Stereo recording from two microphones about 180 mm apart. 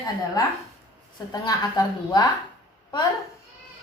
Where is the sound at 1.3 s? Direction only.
20° left (ahead or behind).